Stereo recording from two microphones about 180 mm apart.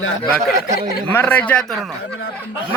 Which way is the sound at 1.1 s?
10° left (ahead or behind).